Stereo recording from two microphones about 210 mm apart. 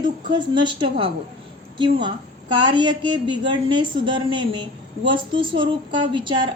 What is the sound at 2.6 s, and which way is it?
Speech, 20° right (ahead or behind).